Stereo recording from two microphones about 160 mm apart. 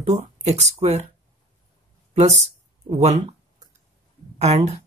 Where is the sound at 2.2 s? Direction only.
45° right (ahead or behind).